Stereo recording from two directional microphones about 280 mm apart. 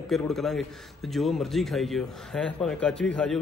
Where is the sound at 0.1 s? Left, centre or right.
Centre.